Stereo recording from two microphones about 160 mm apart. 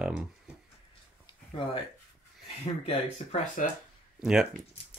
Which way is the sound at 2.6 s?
40° left (ahead or behind).